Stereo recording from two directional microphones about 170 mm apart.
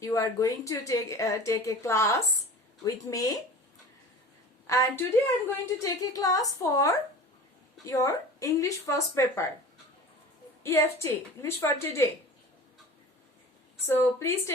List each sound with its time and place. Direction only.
0.0 s a woman's voice: 20° left (ahead or behind)
4.6 s a woman's voice: 15° left (ahead or behind)
10.6 s speech: 15° left (ahead or behind)
13.8 s speech: 15° left (ahead or behind)